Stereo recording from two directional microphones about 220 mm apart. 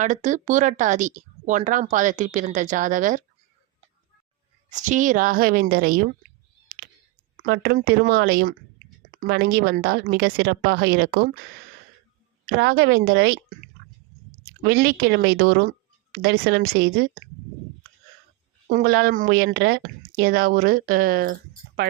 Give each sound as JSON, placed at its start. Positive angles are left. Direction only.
{"t": 0.0, "sound": "speech", "side_deg": -35}
{"t": 4.7, "sound": "speech", "side_deg": -35}
{"t": 7.4, "sound": "a woman's voice", "side_deg": -40}
{"t": 12.5, "sound": "a woman's voice", "side_deg": -45}
{"t": 13.8, "sound": "chewing", "side_deg": -45}
{"t": 14.6, "sound": "a woman's voice", "side_deg": -45}
{"t": 18.7, "sound": "speech", "side_deg": -40}